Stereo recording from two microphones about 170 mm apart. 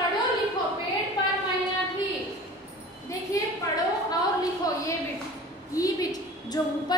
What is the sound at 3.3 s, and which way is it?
Speech, 20° left (ahead or behind).